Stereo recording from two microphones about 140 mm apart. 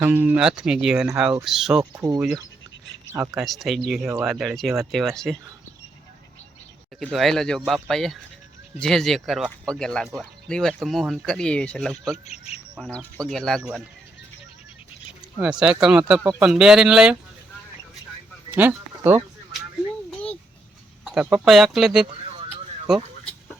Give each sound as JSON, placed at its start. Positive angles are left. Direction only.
{"t": 0.0, "sound": "speech", "side_deg": -15}
{"t": 1.8, "sound": "speech", "side_deg": -25}
{"t": 3.3, "sound": "speech", "side_deg": 0}
{"t": 7.0, "sound": "speech", "side_deg": 0}
{"t": 12.1, "sound": "speech", "side_deg": 50}
{"t": 12.8, "sound": "speech", "side_deg": 5}
{"t": 13.6, "sound": "speech", "side_deg": -10}
{"t": 15.4, "sound": "speech", "side_deg": -5}
{"t": 18.5, "sound": "speech", "side_deg": -10}
{"t": 20.1, "sound": "a sound", "side_deg": 10}
{"t": 21.0, "sound": "speech", "side_deg": -5}